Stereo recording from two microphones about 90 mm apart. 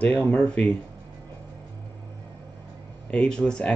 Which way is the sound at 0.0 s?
15° left (ahead or behind).